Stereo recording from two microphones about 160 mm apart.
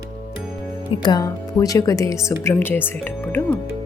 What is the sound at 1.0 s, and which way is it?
Speech, 25° left (ahead or behind).